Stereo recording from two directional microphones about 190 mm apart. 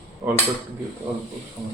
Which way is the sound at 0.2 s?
20° right (ahead or behind).